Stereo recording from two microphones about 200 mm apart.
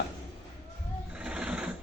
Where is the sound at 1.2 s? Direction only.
5° right (ahead or behind).